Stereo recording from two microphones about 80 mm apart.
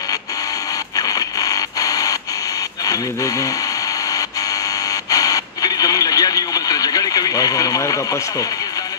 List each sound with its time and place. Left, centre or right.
0.9 s a sound: left
2.8 s speech: left
5.1 s radio: left